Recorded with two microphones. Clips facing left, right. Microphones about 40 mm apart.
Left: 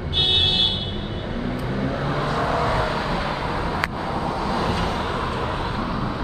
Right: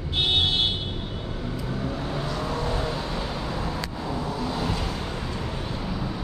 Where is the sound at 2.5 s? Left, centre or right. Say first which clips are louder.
Left 6 dB; left.